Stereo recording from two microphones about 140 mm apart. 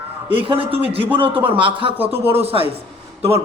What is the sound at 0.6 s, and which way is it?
Speech, 15° right (ahead or behind).